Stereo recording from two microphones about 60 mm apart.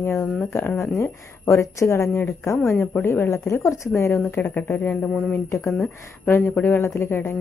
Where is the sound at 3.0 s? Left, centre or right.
Left.